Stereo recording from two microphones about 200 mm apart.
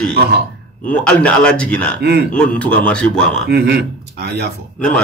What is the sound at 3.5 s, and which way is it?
Speech, 55° right (ahead or behind).